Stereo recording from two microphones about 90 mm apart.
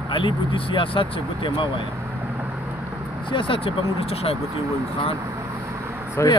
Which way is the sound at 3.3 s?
75° left (ahead or behind).